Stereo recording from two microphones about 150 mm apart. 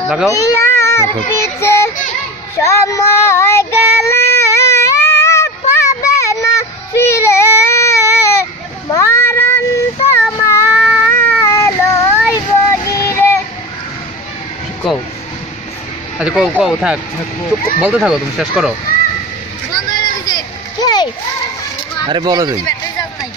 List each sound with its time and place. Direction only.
0.3 s a sound: 20° left (ahead or behind)
1.3 s child singing: 20° left (ahead or behind)
10.3 s a sound: 20° left (ahead or behind)
10.8 s cat: 5° right (ahead or behind)
11.1 s cat: 15° left (ahead or behind)
12.4 s child singing: 20° left (ahead or behind)
14.8 s speech: centre (ahead or behind)
16.2 s speech: 5° right (ahead or behind)
19.7 s a sound: 25° left (ahead or behind)
22.1 s speech: 30° right (ahead or behind)